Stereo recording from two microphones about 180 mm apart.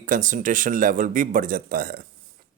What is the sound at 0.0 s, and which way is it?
Speech, 45° right (ahead or behind).